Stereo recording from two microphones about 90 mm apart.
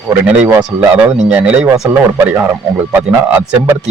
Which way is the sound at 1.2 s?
15° right (ahead or behind).